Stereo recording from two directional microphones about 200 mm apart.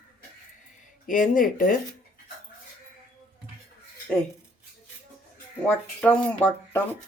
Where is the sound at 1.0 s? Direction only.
40° left (ahead or behind).